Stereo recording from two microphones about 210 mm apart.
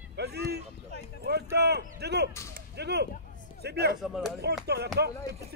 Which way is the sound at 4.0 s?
Centre (ahead or behind).